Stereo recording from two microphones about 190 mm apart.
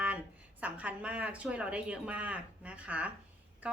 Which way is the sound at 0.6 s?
5° right (ahead or behind).